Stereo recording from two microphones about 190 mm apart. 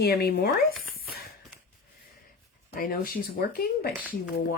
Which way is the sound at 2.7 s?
50° left (ahead or behind).